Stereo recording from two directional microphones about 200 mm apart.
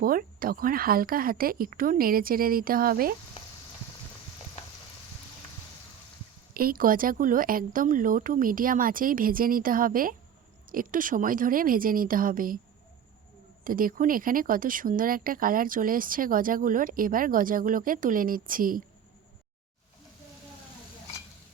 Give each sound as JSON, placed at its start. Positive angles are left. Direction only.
{"t": 0.0, "sound": "speech", "side_deg": -45}
{"t": 6.5, "sound": "speech", "side_deg": -45}
{"t": 13.7, "sound": "speech", "side_deg": -45}